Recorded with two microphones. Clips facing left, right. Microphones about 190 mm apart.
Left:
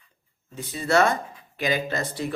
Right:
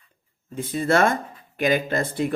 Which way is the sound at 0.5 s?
50° right (ahead or behind).